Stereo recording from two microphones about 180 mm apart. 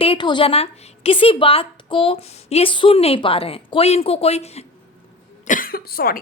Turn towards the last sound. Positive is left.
turn(degrees=55)  # may be behind; listen again after turning